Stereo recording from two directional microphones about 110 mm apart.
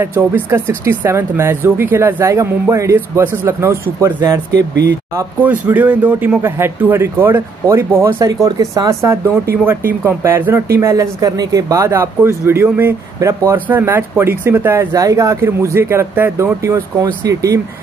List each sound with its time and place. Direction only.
0.0 s speech: 20° right (ahead or behind)
5.4 s speech: 15° right (ahead or behind); by 17.6 s 30° right (ahead or behind)